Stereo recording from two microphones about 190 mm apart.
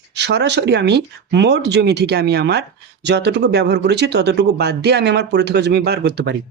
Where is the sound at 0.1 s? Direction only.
65° right (ahead or behind).